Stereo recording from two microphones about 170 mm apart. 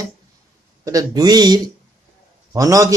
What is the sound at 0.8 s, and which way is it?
Speech, 20° right (ahead or behind).